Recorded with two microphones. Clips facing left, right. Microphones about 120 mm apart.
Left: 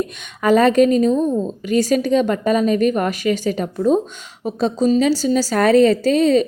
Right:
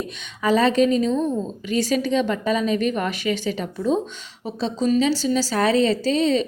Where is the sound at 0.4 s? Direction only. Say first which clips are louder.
Left 5 dB; 50° left (ahead or behind).